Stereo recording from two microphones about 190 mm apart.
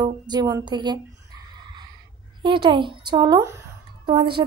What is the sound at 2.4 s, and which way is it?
A woman's voice, 25° right (ahead or behind).